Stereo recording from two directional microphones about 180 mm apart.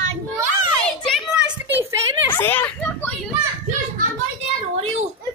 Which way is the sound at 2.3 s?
10° left (ahead or behind).